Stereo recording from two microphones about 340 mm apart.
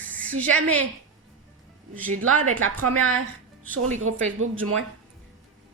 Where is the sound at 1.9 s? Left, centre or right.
Centre.